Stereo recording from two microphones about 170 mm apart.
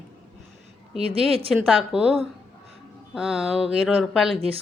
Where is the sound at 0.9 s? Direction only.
35° right (ahead or behind).